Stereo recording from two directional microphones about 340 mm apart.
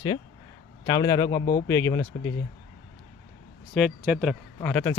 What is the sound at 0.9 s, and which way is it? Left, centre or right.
Speech, centre.